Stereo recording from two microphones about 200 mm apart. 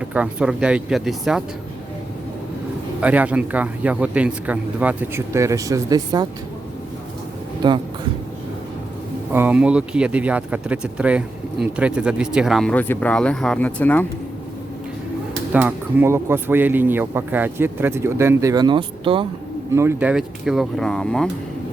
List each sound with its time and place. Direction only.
0.1 s speech: 5° right (ahead or behind)
3.0 s speech: 5° right (ahead or behind)
7.6 s speech: 20° right (ahead or behind)
9.3 s speech: 10° right (ahead or behind); by 14.1 s 10° left (ahead or behind)
15.5 s speech: 10° right (ahead or behind); by 19.3 s 25° right (ahead or behind)
19.7 s speech: 15° right (ahead or behind); by 21.2 s 5° left (ahead or behind)